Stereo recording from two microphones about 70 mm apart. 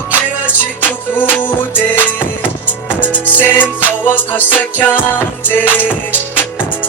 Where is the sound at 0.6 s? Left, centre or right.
Left.